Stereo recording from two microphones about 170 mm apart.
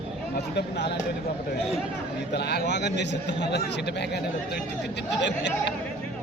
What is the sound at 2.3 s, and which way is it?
A man's voice, 80° left.